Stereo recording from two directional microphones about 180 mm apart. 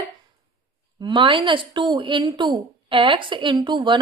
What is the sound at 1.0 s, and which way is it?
Speech, 25° right (ahead or behind).